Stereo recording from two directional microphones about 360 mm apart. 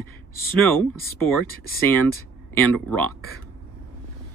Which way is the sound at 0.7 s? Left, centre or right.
Centre.